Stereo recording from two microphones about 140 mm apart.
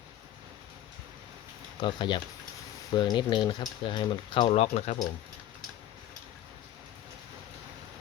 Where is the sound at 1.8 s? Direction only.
35° left (ahead or behind).